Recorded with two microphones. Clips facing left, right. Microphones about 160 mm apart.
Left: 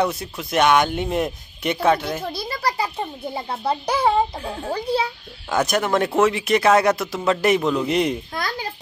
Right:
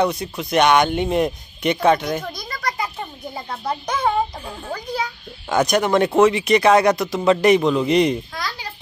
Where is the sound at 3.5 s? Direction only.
30° left (ahead or behind).